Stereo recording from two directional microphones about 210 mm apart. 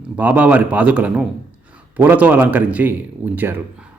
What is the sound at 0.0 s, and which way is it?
Speech, 5° right (ahead or behind).